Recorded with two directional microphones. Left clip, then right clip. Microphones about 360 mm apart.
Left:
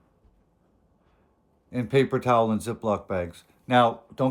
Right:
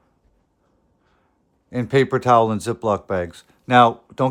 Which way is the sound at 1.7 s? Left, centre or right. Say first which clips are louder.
Right 5 dB; centre.